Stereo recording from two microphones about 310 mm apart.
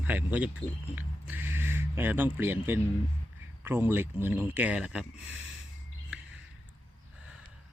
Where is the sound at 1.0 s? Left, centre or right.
Centre.